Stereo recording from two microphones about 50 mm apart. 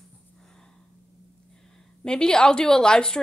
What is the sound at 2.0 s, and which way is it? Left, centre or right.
A woman's voice, centre.